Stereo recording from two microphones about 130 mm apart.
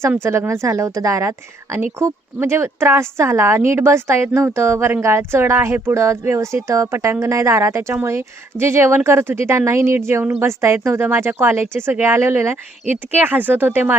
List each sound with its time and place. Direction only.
0.2 s speech: 20° right (ahead or behind)